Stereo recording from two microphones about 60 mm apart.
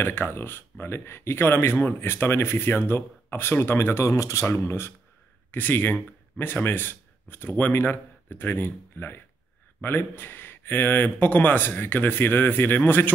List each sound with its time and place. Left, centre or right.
0.0 s speech: left
5.5 s speech: left